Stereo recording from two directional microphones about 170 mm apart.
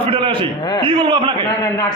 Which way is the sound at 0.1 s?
30° right (ahead or behind).